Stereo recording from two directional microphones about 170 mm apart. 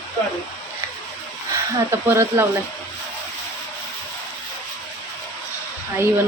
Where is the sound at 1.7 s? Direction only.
15° right (ahead or behind).